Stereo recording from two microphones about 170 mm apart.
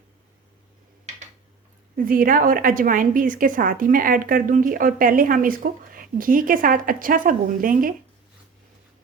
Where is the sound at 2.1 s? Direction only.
55° right (ahead or behind).